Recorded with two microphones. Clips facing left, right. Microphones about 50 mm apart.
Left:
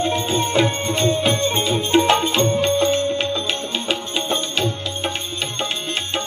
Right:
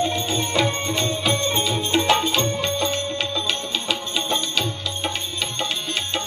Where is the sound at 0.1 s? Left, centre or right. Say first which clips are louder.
Left 4 dB; left.